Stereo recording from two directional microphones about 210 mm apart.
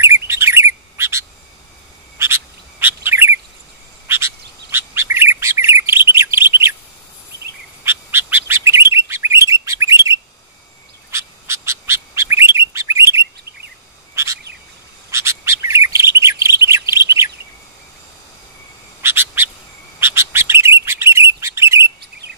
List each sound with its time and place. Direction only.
0.0 s chirp: 15° right (ahead or behind)
2.1 s bird: 10° right (ahead or behind)
6.3 s chirp: 10° right (ahead or behind)
7.8 s chirp: 10° right (ahead or behind)
11.1 s bird: 10° right (ahead or behind)
13.2 s chirp: 50° right (ahead or behind)
14.1 s bird: 15° right (ahead or behind)
18.9 s bird: 10° right (ahead or behind)